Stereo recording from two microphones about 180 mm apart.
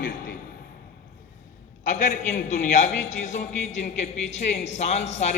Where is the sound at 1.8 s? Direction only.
45° left (ahead or behind).